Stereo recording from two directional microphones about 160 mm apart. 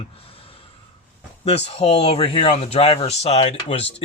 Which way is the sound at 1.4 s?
40° left (ahead or behind).